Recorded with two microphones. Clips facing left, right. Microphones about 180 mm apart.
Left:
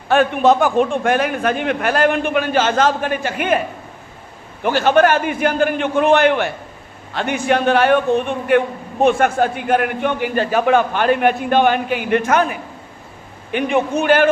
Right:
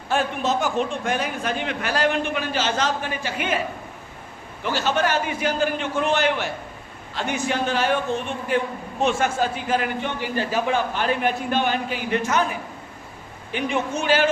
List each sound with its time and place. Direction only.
0.1 s a man's voice: 60° left (ahead or behind)
4.6 s a man's voice: 55° left (ahead or behind)
13.5 s a man's voice: 60° left (ahead or behind)